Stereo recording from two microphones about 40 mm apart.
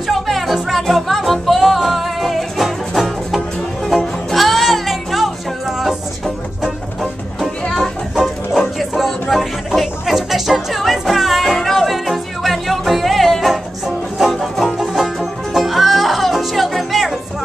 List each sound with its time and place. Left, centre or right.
0.1 s music: centre
8.5 s music: centre